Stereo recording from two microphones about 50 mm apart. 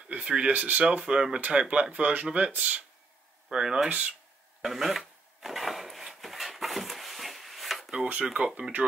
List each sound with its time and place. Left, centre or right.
0.1 s speech: right
0.5 s speech: right
0.8 s speech: right
3.4 s speech: centre
4.6 s a sound: centre
7.9 s speech: right